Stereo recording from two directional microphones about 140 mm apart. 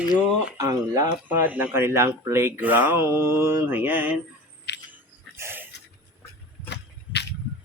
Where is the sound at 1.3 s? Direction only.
10° right (ahead or behind).